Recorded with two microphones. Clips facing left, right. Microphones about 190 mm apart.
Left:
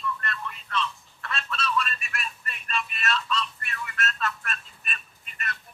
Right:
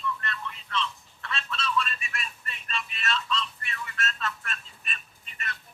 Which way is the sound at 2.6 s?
60° left (ahead or behind).